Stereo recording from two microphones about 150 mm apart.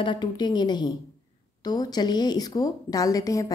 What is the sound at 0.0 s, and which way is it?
A woman's voice, 30° left (ahead or behind).